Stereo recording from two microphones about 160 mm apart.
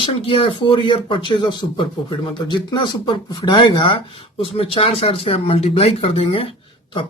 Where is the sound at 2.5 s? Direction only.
30° left (ahead or behind).